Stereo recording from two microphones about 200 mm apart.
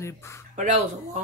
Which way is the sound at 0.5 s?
35° right (ahead or behind).